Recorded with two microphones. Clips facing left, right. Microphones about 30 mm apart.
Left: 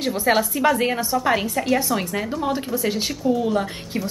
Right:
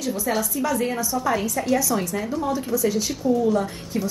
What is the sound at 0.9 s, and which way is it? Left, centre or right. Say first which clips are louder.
Speech: left 3 dB; left.